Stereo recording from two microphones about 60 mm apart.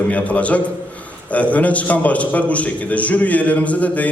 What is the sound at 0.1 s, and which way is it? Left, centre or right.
A man's voice, left.